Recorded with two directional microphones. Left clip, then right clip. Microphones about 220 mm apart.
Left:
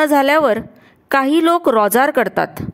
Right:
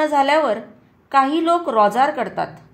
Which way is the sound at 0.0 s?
55° left (ahead or behind).